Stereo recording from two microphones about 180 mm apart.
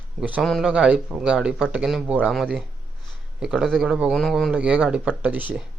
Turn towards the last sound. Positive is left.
turn(degrees=-10)  # may be behind; listen again after turning